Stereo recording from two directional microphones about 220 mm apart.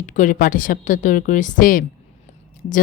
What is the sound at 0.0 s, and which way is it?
Speech, 35° left (ahead or behind).